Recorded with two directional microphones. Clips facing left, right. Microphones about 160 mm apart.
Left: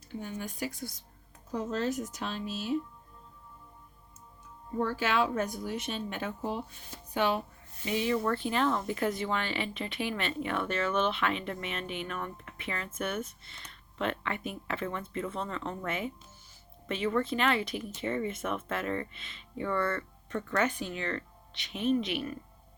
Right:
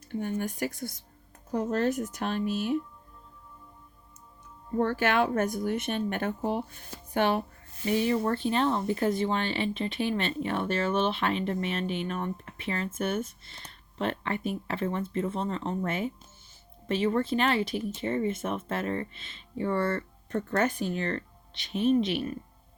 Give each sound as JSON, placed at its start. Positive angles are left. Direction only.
{"t": 0.1, "sound": "a woman's voice", "side_deg": -55}
{"t": 4.8, "sound": "a woman's voice", "side_deg": -60}
{"t": 7.9, "sound": "speech", "side_deg": -35}